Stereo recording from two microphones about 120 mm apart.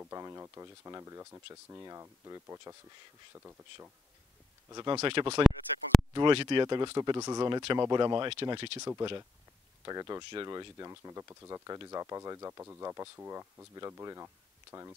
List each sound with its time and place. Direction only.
0.1 s speech: 25° right (ahead or behind)
4.6 s speech: 35° right (ahead or behind)
5.0 s speech: 45° right (ahead or behind)
5.4 s a sound: centre (ahead or behind)
6.1 s speech: 40° right (ahead or behind)
9.8 s speech: 30° right (ahead or behind)